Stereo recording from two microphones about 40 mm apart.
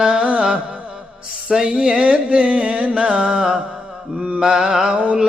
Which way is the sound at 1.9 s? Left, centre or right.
Right.